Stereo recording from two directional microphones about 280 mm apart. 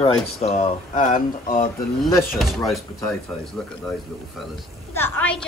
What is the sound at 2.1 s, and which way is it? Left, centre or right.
Speech, centre.